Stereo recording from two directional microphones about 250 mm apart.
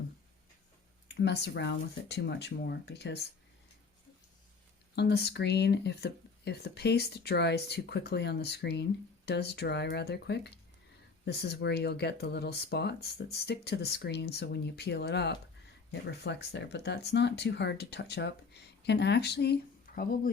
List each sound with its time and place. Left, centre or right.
1.0 s speech: left
4.9 s speech: left
19.9 s a sound: left